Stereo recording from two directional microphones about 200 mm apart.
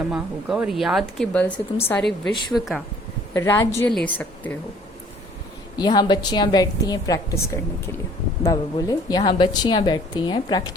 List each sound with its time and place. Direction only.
0.1 s speech: 5° right (ahead or behind)
3.3 s a woman's voice: 15° left (ahead or behind)
5.7 s a woman's voice: 20° left (ahead or behind)